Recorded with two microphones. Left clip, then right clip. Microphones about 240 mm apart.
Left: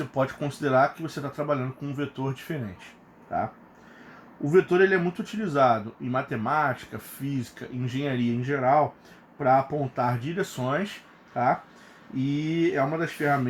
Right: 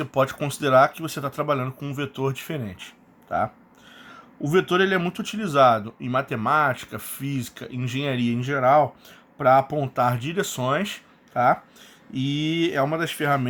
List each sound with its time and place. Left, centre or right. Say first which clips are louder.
0.0 s speech: right 4 dB; right
4.4 s speech: even; right
12.1 s speech: right 3 dB; right